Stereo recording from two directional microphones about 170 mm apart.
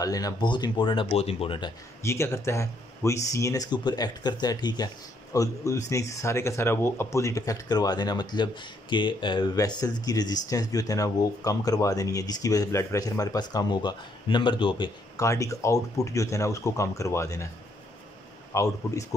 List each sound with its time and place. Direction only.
0.0 s speech: 20° left (ahead or behind)
2.0 s speech: 15° left (ahead or behind)
15.1 s speech: 20° left (ahead or behind)
18.5 s a man's voice: 15° left (ahead or behind)